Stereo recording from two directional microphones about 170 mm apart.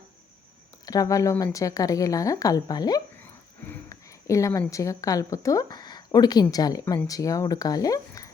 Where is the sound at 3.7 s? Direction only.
20° left (ahead or behind).